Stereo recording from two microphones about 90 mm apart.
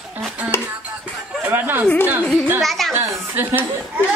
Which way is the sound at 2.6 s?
Centre (ahead or behind).